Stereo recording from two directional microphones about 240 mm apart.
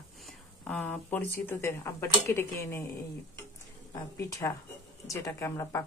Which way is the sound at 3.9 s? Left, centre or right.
Centre.